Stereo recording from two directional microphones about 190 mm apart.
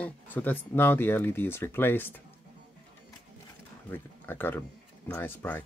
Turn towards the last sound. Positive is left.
turn(degrees=10)  # may be behind; listen again after turning